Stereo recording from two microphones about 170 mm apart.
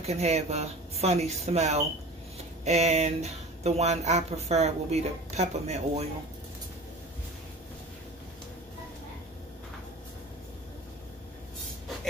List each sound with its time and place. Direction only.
0.0 s speech: 40° right (ahead or behind)